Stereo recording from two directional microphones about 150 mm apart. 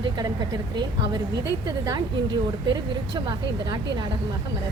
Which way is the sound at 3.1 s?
30° right (ahead or behind).